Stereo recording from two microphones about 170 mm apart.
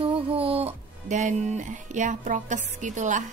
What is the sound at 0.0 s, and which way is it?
Music, 30° right (ahead or behind).